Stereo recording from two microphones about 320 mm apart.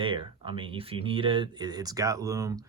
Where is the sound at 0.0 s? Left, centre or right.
Centre.